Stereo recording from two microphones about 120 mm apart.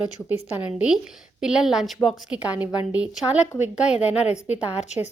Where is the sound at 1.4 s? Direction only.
5° right (ahead or behind).